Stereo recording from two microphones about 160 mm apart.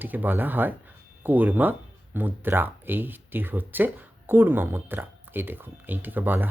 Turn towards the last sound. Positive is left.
turn(degrees=-10)  # may be behind; listen again after turning